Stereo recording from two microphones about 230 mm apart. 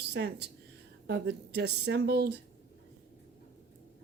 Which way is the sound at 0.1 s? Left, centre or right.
Right.